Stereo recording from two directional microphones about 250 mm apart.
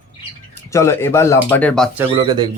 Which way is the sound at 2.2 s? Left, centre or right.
Centre.